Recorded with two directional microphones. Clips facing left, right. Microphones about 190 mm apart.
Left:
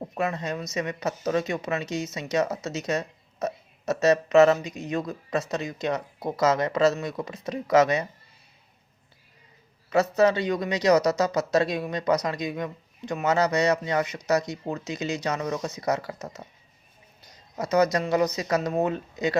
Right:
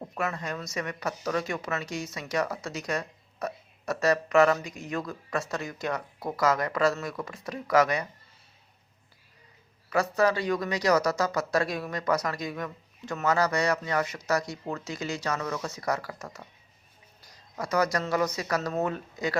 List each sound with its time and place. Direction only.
0.0 s speech: 20° left (ahead or behind)
9.9 s speech: 20° left (ahead or behind)